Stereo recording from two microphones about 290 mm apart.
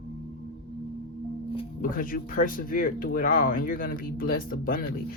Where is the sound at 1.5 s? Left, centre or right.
Left.